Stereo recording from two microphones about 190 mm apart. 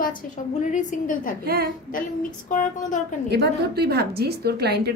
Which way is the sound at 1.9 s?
45° left (ahead or behind).